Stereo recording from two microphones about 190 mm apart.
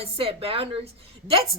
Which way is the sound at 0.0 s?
30° right (ahead or behind).